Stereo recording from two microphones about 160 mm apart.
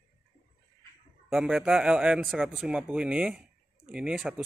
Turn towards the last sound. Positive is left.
turn(degrees=-5)  # may be behind; listen again after turning